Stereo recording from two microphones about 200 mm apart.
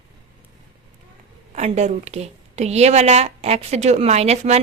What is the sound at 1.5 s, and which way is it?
Speech, 35° right (ahead or behind).